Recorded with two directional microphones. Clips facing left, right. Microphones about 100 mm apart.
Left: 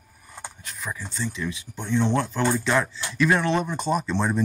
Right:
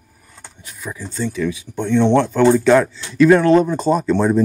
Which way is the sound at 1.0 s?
40° right (ahead or behind).